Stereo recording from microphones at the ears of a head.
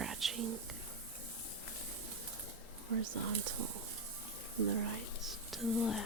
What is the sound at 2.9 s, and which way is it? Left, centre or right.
Speech, right.